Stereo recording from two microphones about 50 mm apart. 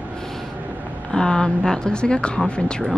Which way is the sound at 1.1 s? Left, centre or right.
Centre.